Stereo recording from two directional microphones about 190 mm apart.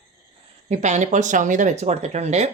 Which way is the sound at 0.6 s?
35° right (ahead or behind).